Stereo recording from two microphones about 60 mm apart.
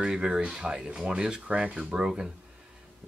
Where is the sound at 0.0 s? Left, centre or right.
Centre.